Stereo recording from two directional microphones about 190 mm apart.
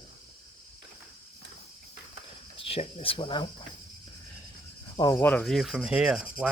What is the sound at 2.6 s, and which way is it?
Speech, 30° left (ahead or behind).